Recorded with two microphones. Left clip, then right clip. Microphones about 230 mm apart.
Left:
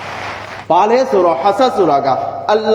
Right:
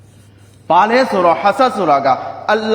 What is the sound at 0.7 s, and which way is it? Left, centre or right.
A man's voice, right.